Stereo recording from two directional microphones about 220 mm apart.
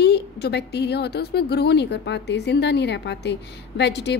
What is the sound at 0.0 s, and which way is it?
A woman's voice, 50° left (ahead or behind).